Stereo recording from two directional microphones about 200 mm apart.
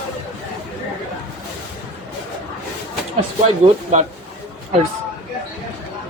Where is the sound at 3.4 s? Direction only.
35° right (ahead or behind).